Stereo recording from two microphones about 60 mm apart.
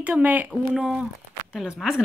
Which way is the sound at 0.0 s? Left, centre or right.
Right.